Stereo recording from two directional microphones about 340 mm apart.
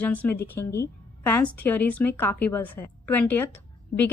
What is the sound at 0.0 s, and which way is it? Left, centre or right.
A woman's voice, centre.